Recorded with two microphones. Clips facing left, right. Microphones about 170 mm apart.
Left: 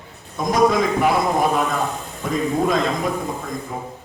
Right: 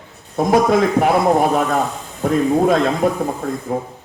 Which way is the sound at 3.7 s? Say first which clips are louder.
Right 8 dB; 55° right (ahead or behind).